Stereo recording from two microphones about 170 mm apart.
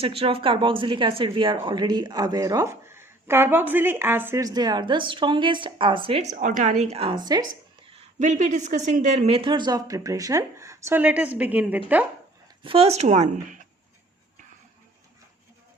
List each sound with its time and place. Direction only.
0.0 s speech: 35° right (ahead or behind)
7.9 s speech: 45° right (ahead or behind); by 11.8 s 10° right (ahead or behind)
12.6 s speech: 35° right (ahead or behind)